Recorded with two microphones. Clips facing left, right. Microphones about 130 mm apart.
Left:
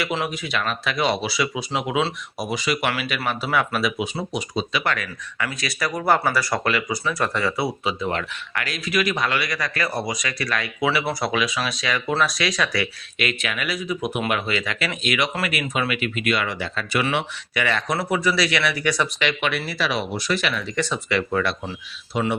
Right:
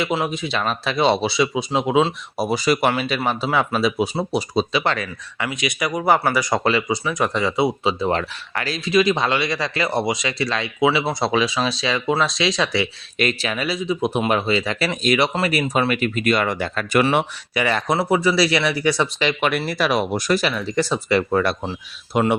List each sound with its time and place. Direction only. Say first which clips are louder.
0.3 s speech: right 3 dB; 25° right (ahead or behind)
2.5 s speech: right 5 dB; 35° right (ahead or behind)
22.1 s speech: right 5 dB; 55° right (ahead or behind)